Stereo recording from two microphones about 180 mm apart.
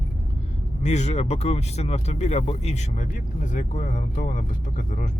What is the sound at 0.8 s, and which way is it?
Speech, 40° left (ahead or behind).